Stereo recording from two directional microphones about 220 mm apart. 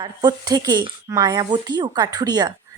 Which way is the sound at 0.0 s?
20° right (ahead or behind).